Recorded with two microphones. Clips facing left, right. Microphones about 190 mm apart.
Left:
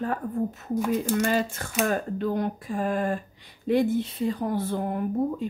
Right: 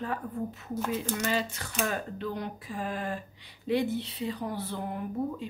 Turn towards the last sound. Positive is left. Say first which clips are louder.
# left 6 dB
turn(degrees=50)  # may be behind; listen again after turning